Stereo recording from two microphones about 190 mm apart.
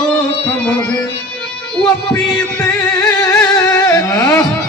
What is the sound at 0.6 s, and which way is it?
Music, 5° left (ahead or behind).